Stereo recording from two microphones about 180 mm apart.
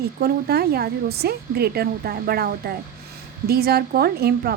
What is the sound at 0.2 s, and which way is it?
A woman's voice, 60° right (ahead or behind).